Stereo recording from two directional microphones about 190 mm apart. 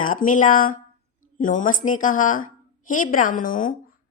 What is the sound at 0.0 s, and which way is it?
A woman's voice, 45° left (ahead or behind).